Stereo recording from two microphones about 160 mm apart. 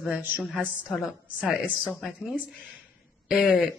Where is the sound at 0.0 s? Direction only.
5° right (ahead or behind).